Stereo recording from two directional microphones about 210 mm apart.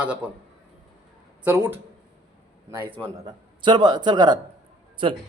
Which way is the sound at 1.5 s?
10° right (ahead or behind).